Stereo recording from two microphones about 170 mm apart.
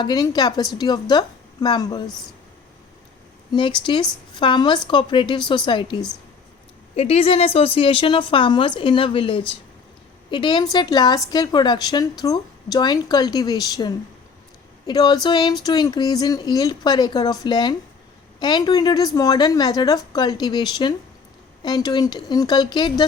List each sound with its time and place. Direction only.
0.0 s speech: 25° left (ahead or behind)
3.5 s speech: 30° left (ahead or behind)
6.9 s a woman's voice: 40° left (ahead or behind)